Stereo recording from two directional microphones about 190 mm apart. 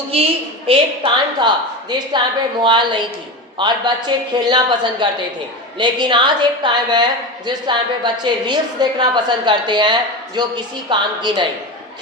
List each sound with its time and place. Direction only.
0.1 s a woman's voice: 30° right (ahead or behind)